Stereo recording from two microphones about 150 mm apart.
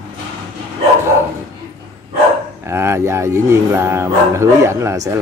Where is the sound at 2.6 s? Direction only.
15° right (ahead or behind).